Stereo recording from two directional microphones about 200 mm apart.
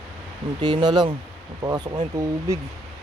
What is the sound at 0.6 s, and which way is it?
Speech, 20° right (ahead or behind).